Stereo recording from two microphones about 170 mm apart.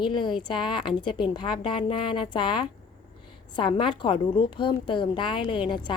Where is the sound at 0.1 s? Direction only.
30° left (ahead or behind).